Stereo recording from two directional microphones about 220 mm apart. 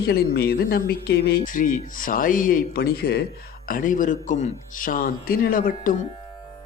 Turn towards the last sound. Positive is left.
turn(degrees=40)  # may be behind; listen again after turning